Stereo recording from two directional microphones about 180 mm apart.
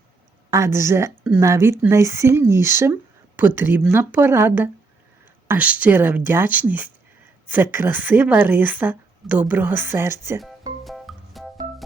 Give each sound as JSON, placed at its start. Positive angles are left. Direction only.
{"t": 0.5, "sound": "speech", "side_deg": -15}
{"t": 10.8, "sound": "music", "side_deg": 0}